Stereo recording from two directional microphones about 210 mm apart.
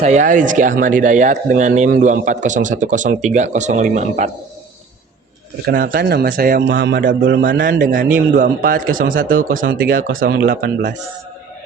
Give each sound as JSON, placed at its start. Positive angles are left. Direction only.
{"t": 0.0, "sound": "speech", "side_deg": -35}
{"t": 5.6, "sound": "speech", "side_deg": -45}
{"t": 6.7, "sound": "speech", "side_deg": -60}
{"t": 7.6, "sound": "speech", "side_deg": -40}